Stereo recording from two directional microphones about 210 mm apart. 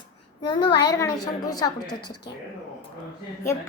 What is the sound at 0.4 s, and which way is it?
A child's voice, 20° left (ahead or behind).